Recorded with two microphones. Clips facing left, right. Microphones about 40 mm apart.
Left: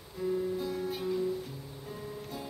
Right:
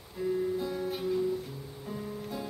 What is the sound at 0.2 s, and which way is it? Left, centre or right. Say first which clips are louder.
Music: right 1 dB; centre.